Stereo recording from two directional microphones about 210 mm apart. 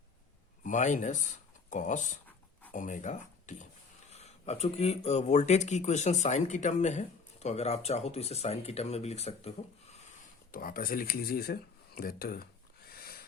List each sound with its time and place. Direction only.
0.6 s speech: 35° left (ahead or behind)
10.2 s speech: 40° left (ahead or behind)
12.9 s a sound: 45° left (ahead or behind)